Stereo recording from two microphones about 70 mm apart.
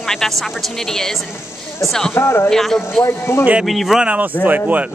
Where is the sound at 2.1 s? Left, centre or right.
Left.